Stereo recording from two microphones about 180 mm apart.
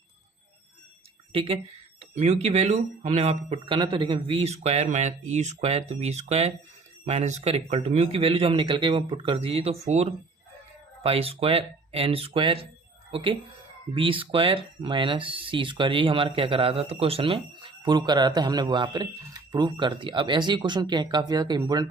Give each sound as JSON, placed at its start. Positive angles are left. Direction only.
{"t": 1.3, "sound": "a woman's voice", "side_deg": -30}